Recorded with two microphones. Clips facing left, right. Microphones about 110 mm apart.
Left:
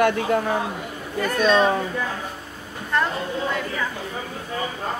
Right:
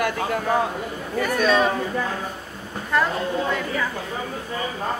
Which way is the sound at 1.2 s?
5° right (ahead or behind).